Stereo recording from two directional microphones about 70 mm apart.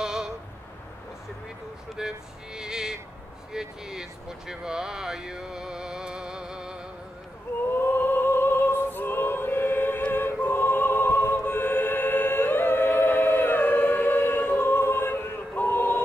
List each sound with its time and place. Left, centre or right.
0.0 s a sound: centre
2.0 s speech: centre
7.8 s choir: left